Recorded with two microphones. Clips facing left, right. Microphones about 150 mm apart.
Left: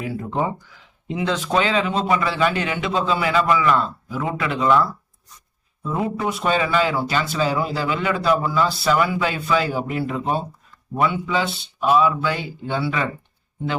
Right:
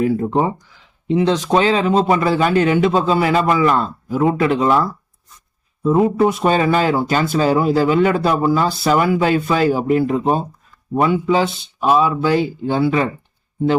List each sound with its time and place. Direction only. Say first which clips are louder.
0.0 s a man's voice: right 7 dB; 40° right (ahead or behind)